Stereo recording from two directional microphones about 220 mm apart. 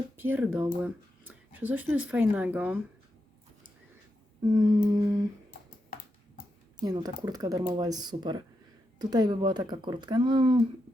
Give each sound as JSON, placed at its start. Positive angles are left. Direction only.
{"t": 0.2, "sound": "speech", "side_deg": -10}
{"t": 4.5, "sound": "speech", "side_deg": -20}
{"t": 6.8, "sound": "speech", "side_deg": -20}